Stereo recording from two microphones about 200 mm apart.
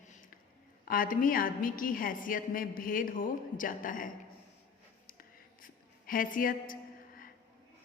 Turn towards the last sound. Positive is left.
turn(degrees=45)  # may be behind; listen again after turning